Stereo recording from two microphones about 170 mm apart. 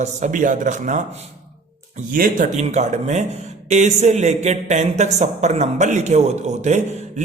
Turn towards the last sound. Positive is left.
turn(degrees=-45)  # may be behind; listen again after turning